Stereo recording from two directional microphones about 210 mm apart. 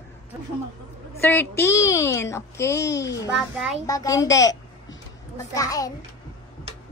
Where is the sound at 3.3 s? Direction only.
Centre (ahead or behind).